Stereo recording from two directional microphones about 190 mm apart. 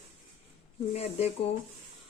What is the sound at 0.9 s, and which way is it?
Speech, 35° left (ahead or behind).